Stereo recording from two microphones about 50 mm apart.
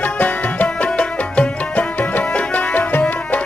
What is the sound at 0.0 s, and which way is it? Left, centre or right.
Music, left.